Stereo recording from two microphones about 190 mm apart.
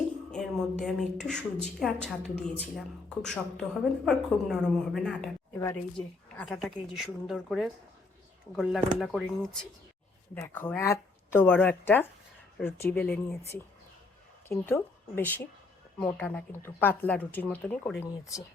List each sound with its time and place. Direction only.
0.3 s a woman's voice: 5° left (ahead or behind)
5.5 s a woman's voice: 15° left (ahead or behind)